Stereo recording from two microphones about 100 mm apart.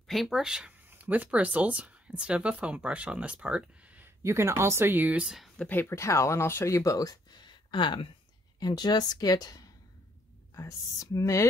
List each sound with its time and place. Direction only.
0.0 s speech: centre (ahead or behind)
0.8 s speech: 15° right (ahead or behind)
4.2 s speech: 30° right (ahead or behind)
5.3 s speech: centre (ahead or behind)
5.7 s speech: 20° left (ahead or behind); by 8.1 s 55° left (ahead or behind)
8.5 s speech: 45° left (ahead or behind)